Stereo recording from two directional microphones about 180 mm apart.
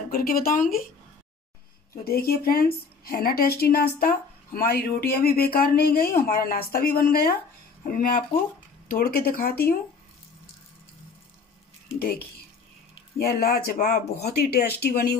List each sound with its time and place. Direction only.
0.1 s a woman's voice: 55° left (ahead or behind)
2.0 s a woman's voice: 60° left (ahead or behind)
13.2 s a woman's voice: 55° left (ahead or behind)
14.2 s a woman's voice: 60° left (ahead or behind)